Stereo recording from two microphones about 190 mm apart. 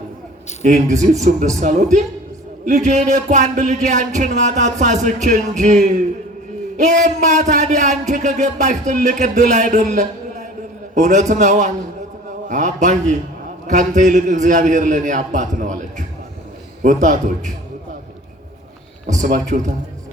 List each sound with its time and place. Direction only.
0.6 s speech: 40° right (ahead or behind)
19.0 s speech: 40° right (ahead or behind)